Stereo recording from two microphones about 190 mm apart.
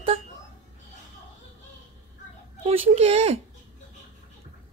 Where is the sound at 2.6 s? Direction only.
30° right (ahead or behind).